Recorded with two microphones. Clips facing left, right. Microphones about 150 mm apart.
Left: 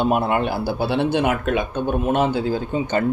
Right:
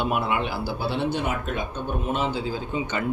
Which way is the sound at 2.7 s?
45° left (ahead or behind).